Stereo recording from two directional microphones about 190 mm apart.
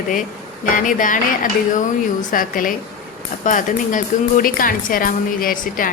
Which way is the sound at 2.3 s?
45° left (ahead or behind).